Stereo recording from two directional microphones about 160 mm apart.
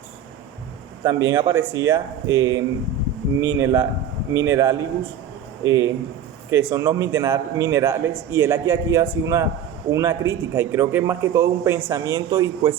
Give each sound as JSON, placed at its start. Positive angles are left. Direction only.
{"t": 1.0, "sound": "a man's voice", "side_deg": -20}